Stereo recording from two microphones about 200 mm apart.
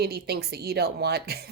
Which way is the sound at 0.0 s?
50° right (ahead or behind).